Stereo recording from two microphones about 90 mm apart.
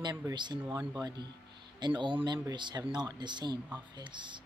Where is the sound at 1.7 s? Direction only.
60° right (ahead or behind).